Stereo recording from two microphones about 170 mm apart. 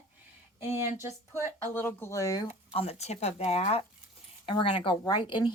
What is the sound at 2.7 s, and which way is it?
A woman's voice, 35° left (ahead or behind).